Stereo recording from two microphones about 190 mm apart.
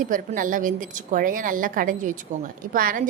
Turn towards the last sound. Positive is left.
turn(degrees=-45)  # may be behind; listen again after turning